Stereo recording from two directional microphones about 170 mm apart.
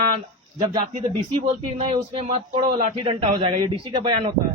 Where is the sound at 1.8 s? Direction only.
35° right (ahead or behind).